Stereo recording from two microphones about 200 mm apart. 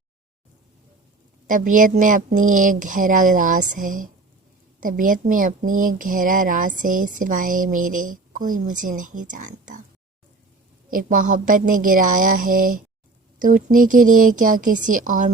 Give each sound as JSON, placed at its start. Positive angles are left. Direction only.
{"t": 1.5, "sound": "speech", "side_deg": -40}
{"t": 10.9, "sound": "a woman's voice", "side_deg": -40}